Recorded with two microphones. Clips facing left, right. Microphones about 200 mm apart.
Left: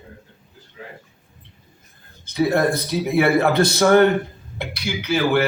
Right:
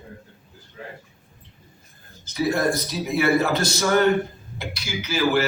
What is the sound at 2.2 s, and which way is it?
Speech, 60° left (ahead or behind).